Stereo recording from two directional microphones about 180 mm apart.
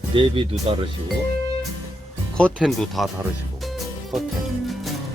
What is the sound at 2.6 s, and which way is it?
Speech, centre (ahead or behind).